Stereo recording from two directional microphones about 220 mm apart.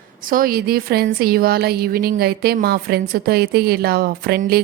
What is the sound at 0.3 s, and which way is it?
A woman's voice, 40° right (ahead or behind).